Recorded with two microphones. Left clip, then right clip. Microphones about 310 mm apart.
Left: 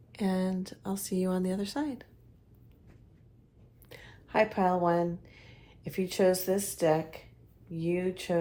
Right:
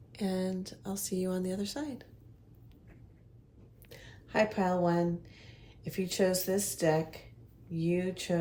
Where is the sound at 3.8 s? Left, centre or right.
Left.